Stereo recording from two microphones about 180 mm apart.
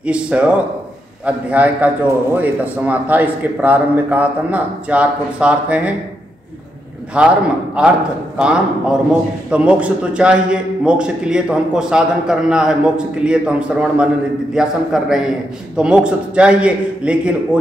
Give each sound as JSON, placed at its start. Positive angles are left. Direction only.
{"t": 0.0, "sound": "a man's voice", "side_deg": -5}
{"t": 7.2, "sound": "a man's voice", "side_deg": -5}